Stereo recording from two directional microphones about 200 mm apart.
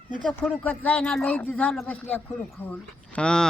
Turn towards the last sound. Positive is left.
turn(degrees=5)  # may be behind; listen again after turning